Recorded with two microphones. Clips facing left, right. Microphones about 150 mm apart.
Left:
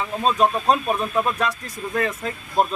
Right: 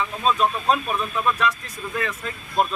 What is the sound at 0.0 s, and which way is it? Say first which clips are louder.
Speech: left 2 dB; 35° left (ahead or behind).